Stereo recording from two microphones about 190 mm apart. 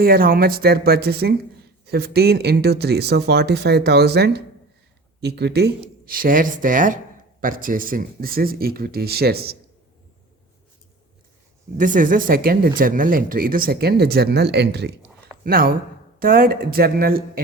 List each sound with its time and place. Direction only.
0.0 s speech: 50° right (ahead or behind)
11.8 s speech: 45° right (ahead or behind); by 14.9 s 60° right (ahead or behind)
15.4 s speech: 50° right (ahead or behind)